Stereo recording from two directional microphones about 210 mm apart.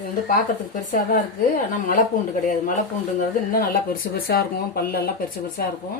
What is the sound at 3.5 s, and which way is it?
Speech, 45° left (ahead or behind).